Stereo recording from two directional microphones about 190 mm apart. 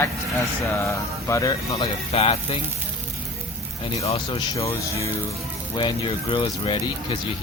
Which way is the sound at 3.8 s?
35° left (ahead or behind).